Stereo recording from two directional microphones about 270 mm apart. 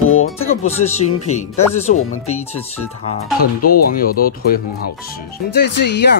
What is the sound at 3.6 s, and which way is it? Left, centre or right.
Speech, left.